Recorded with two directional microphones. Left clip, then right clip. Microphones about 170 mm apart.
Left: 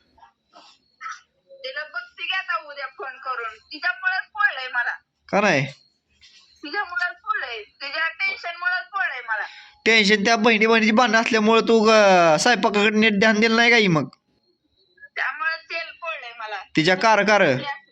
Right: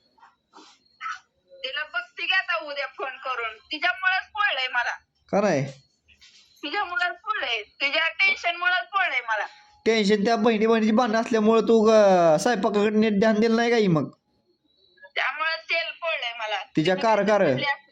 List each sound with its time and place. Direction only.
0.9 s dog: 25° right (ahead or behind)
1.6 s a sound: 30° right (ahead or behind)
5.2 s speech: centre (ahead or behind)
6.6 s a sound: 20° right (ahead or behind)
9.6 s a man's voice: 5° right (ahead or behind)
15.2 s wail: 25° right (ahead or behind)
16.7 s a man's voice: centre (ahead or behind)